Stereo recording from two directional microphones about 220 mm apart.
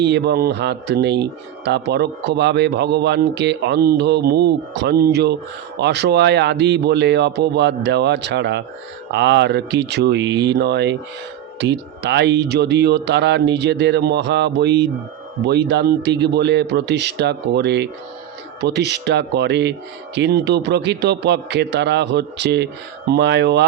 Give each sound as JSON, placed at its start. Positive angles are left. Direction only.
{"t": 0.0, "sound": "speech", "side_deg": -50}